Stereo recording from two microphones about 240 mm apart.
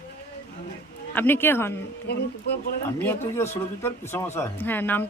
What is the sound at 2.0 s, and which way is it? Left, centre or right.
Speech, left.